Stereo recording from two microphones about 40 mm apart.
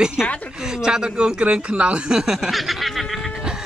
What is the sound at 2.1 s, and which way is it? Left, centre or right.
Speech, centre.